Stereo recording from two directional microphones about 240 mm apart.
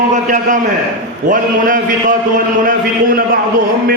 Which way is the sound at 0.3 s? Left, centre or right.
Right.